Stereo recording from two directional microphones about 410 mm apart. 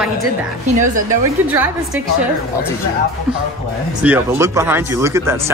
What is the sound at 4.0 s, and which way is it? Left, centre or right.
Speech, centre.